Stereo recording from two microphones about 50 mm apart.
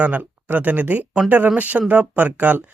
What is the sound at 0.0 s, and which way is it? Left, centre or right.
A man's voice, right.